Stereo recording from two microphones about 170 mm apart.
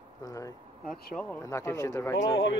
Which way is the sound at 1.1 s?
10° left (ahead or behind).